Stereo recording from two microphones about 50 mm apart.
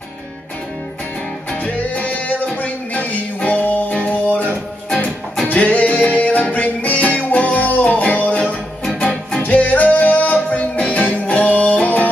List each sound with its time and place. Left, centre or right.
1.6 s music: left
4.8 s music: left